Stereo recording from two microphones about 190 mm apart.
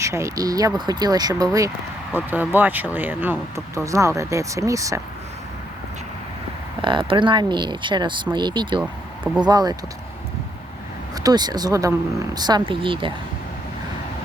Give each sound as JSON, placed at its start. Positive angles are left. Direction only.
{"t": 0.0, "sound": "speech", "side_deg": -15}
{"t": 6.8, "sound": "speech", "side_deg": -25}
{"t": 8.8, "sound": "a sound", "side_deg": -5}
{"t": 9.4, "sound": "speech", "side_deg": -20}
{"t": 11.1, "sound": "speech", "side_deg": -20}